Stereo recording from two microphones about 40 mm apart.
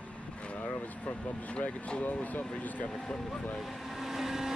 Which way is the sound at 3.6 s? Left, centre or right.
Centre.